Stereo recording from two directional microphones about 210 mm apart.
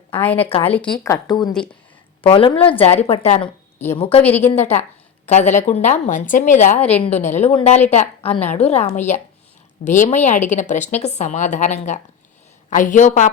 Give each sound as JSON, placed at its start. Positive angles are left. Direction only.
{"t": 0.2, "sound": "a woman's voice", "side_deg": 10}
{"t": 0.4, "sound": "a woman's voice", "side_deg": 30}
{"t": 0.7, "sound": "a woman's voice", "side_deg": 5}
{"t": 1.1, "sound": "a woman's voice", "side_deg": 20}
{"t": 4.2, "sound": "a woman's voice", "side_deg": 10}
{"t": 4.8, "sound": "a woman's voice", "side_deg": 35}